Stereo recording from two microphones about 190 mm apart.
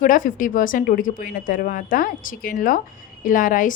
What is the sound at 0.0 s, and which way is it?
A woman's voice, 45° left (ahead or behind).